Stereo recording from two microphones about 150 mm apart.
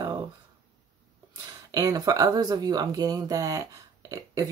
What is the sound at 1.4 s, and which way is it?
Speech, 25° right (ahead or behind).